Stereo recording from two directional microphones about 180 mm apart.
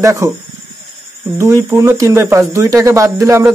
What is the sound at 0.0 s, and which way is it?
Speech, 15° right (ahead or behind).